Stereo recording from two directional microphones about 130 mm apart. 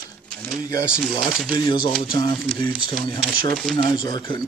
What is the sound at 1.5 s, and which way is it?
Speech, 35° left (ahead or behind).